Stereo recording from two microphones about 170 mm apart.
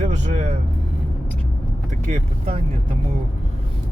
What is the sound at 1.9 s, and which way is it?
Speech, 45° right (ahead or behind).